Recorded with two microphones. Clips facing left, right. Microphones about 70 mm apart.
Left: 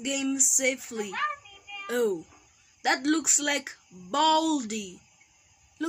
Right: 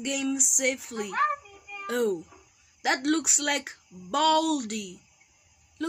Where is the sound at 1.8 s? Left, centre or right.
Centre.